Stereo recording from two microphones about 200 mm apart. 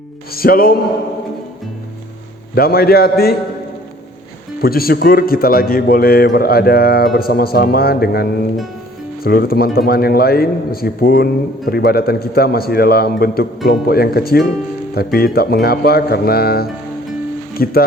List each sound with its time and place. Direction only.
0.3 s a man's voice: 45° left (ahead or behind)
2.6 s a man's voice: 50° left (ahead or behind)
4.6 s a man's voice: 50° left (ahead or behind)